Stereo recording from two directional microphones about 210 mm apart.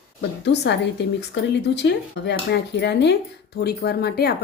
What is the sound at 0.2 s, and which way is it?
A woman's voice, 55° left (ahead or behind).